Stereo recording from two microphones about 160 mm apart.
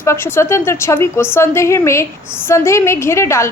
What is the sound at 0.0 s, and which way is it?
A woman's voice, 15° left (ahead or behind).